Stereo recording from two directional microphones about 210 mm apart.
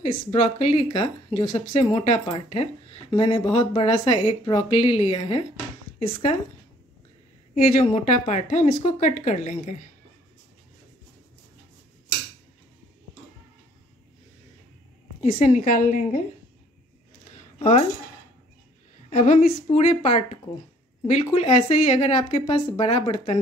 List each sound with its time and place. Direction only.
0.0 s speech: 30° left (ahead or behind)
7.5 s speech: 30° left (ahead or behind)
15.1 s speech: 30° left (ahead or behind)
17.6 s speech: 30° left (ahead or behind)
19.0 s speech: 30° left (ahead or behind)